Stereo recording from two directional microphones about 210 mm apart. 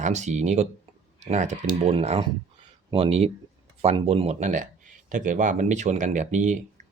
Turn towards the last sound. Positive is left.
turn(degrees=-35)  # may be behind; listen again after turning